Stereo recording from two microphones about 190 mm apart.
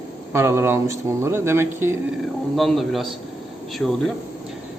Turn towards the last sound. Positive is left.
turn(degrees=5)  # may be behind; listen again after turning